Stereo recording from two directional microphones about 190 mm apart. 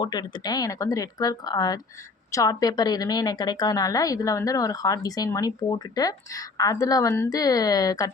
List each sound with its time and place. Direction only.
0.0 s a woman's voice: 25° left (ahead or behind)